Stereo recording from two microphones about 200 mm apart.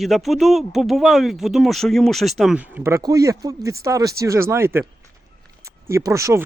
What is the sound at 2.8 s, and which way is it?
Speech, 15° right (ahead or behind).